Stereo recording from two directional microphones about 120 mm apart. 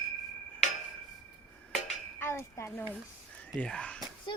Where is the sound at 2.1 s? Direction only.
20° left (ahead or behind).